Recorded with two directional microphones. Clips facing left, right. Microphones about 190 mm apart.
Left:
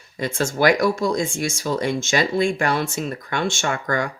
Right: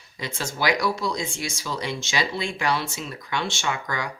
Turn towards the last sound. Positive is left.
turn(degrees=50)  # may be behind; listen again after turning